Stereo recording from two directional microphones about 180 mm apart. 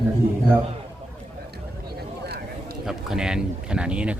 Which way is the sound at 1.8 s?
60° right (ahead or behind).